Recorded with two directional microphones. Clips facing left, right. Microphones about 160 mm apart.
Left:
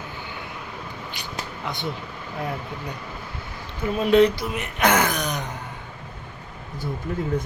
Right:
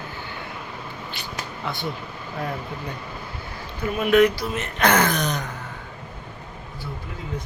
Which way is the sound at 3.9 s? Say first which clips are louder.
Even; 30° left (ahead or behind).